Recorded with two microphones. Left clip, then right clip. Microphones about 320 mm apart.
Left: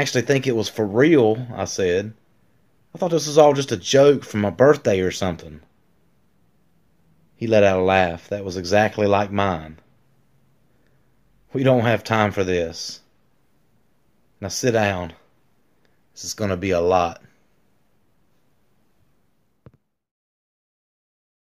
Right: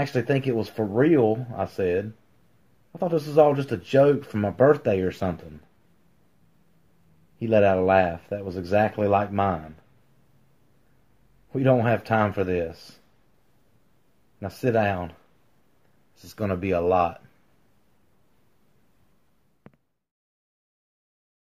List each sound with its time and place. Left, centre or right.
0.0 s speech: left
7.3 s speech: left
11.5 s speech: left
14.4 s speech: left
16.2 s speech: left